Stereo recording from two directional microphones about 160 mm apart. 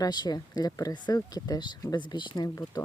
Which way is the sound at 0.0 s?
25° left (ahead or behind).